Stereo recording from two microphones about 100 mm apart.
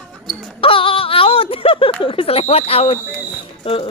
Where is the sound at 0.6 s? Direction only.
65° left (ahead or behind); by 2.9 s 85° left.